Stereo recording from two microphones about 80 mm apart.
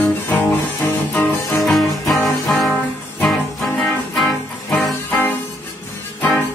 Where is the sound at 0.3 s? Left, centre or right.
Left.